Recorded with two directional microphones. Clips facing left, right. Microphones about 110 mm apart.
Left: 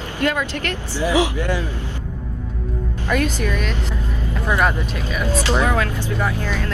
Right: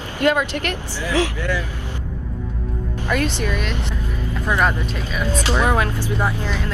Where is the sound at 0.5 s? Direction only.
35° right (ahead or behind).